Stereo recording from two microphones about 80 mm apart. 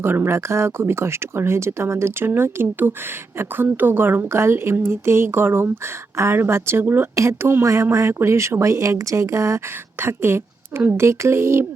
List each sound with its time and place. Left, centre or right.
0.0 s a woman's voice: right
10.0 s speech: right